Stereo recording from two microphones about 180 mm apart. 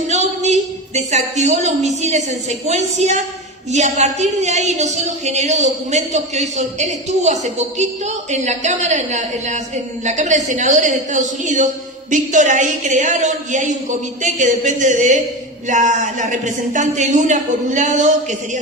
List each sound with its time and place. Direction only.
0.1 s a woman's voice: 40° right (ahead or behind)